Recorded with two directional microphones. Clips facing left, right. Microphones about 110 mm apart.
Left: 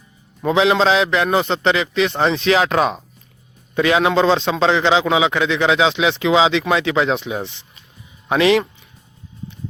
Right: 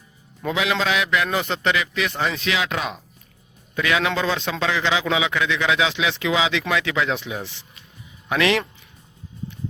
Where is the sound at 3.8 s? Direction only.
30° left (ahead or behind).